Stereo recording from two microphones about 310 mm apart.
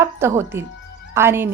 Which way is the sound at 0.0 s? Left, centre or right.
Centre.